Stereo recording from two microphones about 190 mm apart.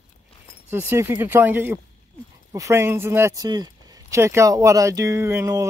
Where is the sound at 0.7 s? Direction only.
15° right (ahead or behind).